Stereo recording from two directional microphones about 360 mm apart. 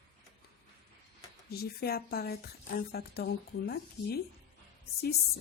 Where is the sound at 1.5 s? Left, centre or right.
Left.